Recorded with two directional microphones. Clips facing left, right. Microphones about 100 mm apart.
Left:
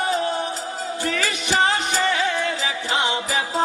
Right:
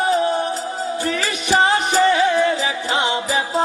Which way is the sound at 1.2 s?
20° right (ahead or behind).